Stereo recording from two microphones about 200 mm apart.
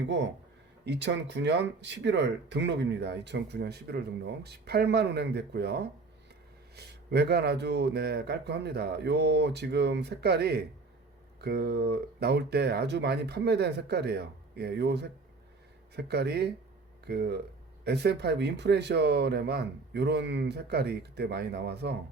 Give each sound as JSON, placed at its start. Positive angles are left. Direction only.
{"t": 0.0, "sound": "speech", "side_deg": -60}